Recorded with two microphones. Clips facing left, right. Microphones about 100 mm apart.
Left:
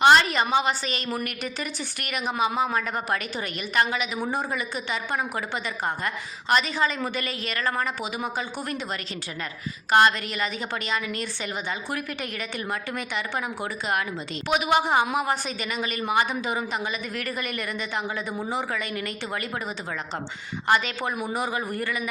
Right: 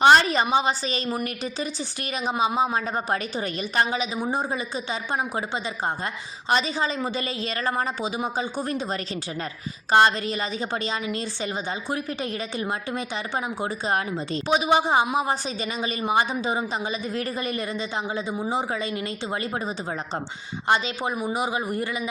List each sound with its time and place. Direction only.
0.0 s a sound: 30° right (ahead or behind)
0.5 s a woman's voice: 30° right (ahead or behind)
6.6 s a woman's voice: 30° right (ahead or behind)